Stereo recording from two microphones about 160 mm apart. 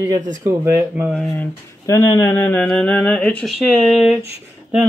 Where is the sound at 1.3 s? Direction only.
20° left (ahead or behind); by 4.1 s centre (ahead or behind).